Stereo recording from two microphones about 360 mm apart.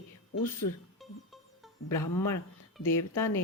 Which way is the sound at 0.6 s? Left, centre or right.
Left.